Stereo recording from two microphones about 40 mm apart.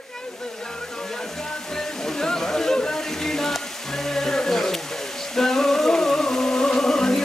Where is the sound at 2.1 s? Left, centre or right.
Centre.